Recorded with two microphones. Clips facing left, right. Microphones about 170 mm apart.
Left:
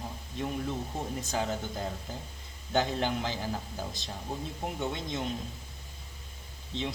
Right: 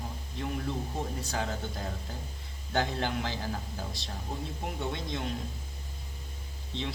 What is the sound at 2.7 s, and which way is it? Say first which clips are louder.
Speech: left 2 dB; 15° left (ahead or behind).